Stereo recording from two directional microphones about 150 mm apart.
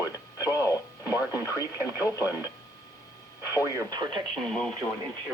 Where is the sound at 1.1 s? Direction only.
15° right (ahead or behind).